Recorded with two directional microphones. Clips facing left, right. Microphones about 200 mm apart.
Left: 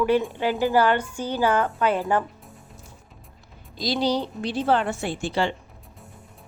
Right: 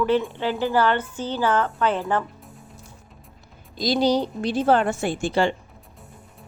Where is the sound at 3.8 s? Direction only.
45° right (ahead or behind).